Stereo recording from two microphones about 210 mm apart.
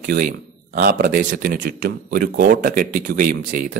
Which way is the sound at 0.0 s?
40° right (ahead or behind).